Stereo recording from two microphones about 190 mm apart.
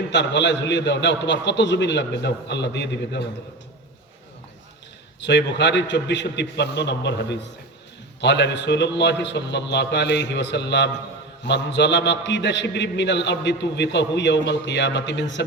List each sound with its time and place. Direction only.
0.1 s a man's voice: 65° left (ahead or behind)
5.2 s a man's voice: 65° left (ahead or behind)